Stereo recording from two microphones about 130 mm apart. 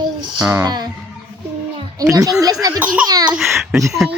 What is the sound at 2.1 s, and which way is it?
A child's voice, 25° right (ahead or behind).